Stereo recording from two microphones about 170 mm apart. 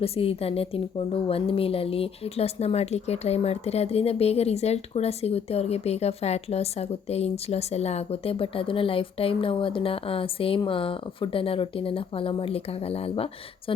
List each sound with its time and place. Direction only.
0.0 s a woman's voice: 35° left (ahead or behind)